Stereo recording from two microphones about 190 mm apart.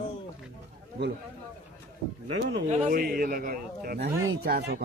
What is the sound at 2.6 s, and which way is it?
A man's voice, 40° right (ahead or behind).